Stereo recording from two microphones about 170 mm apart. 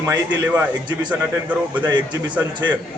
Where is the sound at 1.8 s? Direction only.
25° right (ahead or behind).